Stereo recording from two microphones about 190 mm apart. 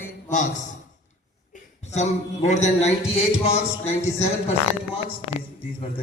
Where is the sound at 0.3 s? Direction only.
40° left (ahead or behind).